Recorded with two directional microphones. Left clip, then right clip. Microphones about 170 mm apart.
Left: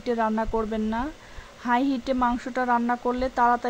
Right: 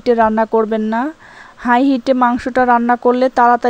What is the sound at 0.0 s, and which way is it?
Speech, 40° right (ahead or behind).